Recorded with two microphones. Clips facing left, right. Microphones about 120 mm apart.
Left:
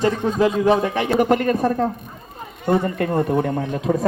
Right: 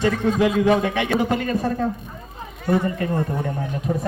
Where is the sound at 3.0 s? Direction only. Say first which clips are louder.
Left 5 dB; 70° left (ahead or behind).